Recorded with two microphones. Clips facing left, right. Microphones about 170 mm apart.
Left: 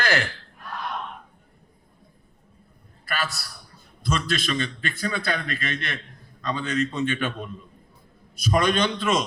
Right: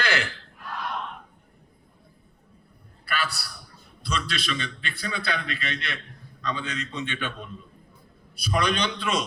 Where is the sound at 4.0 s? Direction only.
45° left (ahead or behind).